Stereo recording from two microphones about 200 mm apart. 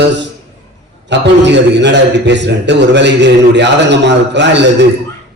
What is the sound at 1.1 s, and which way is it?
A man's voice, 60° right (ahead or behind).